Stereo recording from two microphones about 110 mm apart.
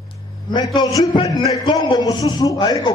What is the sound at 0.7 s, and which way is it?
A man's voice, 40° left (ahead or behind).